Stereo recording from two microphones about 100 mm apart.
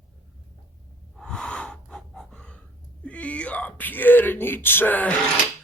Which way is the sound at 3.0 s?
15° left (ahead or behind).